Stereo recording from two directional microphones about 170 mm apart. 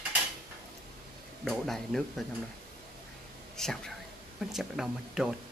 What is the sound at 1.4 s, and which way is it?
Speech, centre (ahead or behind).